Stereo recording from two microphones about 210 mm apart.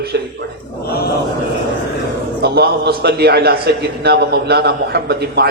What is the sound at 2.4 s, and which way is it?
A man's voice, 50° right (ahead or behind).